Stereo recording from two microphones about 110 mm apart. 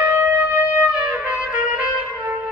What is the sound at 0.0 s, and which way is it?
Wind instrument, 15° right (ahead or behind).